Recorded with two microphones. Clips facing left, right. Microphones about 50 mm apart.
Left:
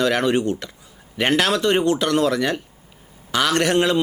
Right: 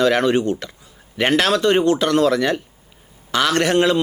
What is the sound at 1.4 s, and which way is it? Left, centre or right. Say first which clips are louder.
Speech: right 3 dB; right.